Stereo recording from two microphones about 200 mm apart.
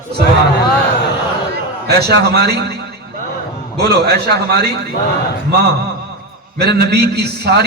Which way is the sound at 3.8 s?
55° right (ahead or behind).